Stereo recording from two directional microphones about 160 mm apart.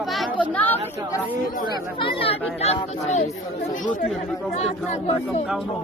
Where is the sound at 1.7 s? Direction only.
25° right (ahead or behind).